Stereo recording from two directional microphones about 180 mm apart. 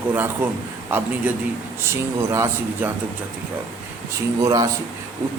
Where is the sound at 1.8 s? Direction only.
15° right (ahead or behind).